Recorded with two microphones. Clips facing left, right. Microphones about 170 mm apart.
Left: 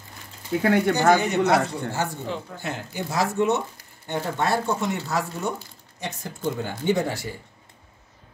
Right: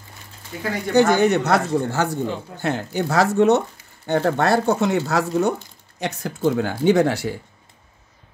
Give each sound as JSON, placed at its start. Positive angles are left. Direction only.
{"t": 0.6, "sound": "speech", "side_deg": 65}
{"t": 0.9, "sound": "speech", "side_deg": -65}
{"t": 2.2, "sound": "speech", "side_deg": 0}
{"t": 2.6, "sound": "speech", "side_deg": -70}